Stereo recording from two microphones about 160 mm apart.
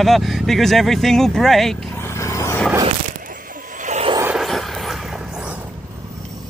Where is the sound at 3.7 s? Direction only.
50° right (ahead or behind).